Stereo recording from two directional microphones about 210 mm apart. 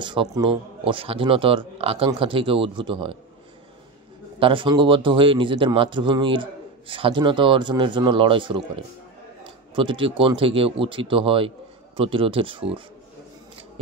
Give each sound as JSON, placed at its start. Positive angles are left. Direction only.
{"t": 0.0, "sound": "speech", "side_deg": -20}
{"t": 4.4, "sound": "speech", "side_deg": -25}